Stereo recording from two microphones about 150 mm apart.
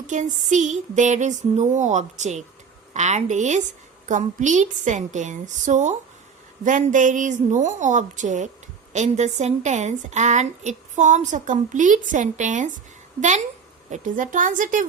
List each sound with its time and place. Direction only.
0.1 s a woman's voice: 55° right (ahead or behind)
13.9 s a woman's voice: 60° right (ahead or behind)